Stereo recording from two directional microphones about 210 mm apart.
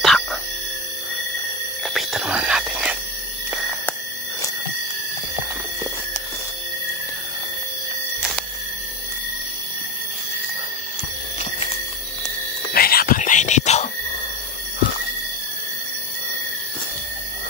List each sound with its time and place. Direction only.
0.0 s a sound: 5° left (ahead or behind)
2.0 s whispering: centre (ahead or behind)
12.7 s whispering: 45° left (ahead or behind)